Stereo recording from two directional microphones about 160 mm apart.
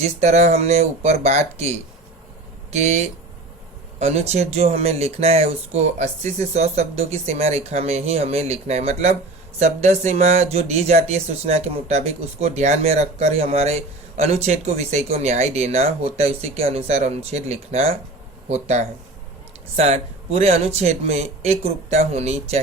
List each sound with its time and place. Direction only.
0.0 s speech: 45° right (ahead or behind)
2.7 s speech: 45° right (ahead or behind)